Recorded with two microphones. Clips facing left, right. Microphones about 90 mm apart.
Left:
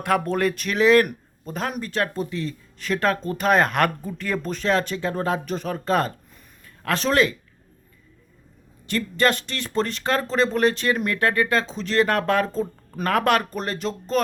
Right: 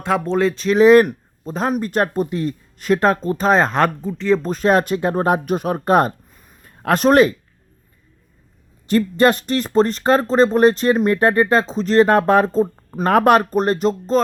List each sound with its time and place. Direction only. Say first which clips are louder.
0.0 s speech: right 4 dB; 20° right (ahead or behind)
1.8 s speech: right 6 dB; 45° right (ahead or behind); by 3.9 s 30° right (ahead or behind)
4.4 s speech: right 6 dB; 40° right (ahead or behind)
8.9 s speech: right 7 dB; 40° right (ahead or behind)